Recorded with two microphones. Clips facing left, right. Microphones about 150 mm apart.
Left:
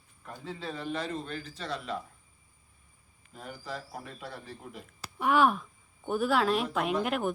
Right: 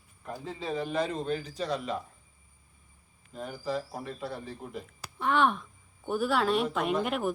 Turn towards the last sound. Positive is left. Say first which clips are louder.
# right 1 dB
turn(degrees=0)  # may be behind; listen again after turning